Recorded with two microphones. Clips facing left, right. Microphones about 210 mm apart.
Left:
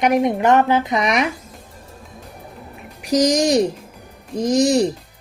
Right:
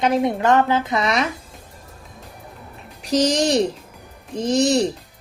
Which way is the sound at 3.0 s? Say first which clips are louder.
Left 2 dB; 10° left (ahead or behind).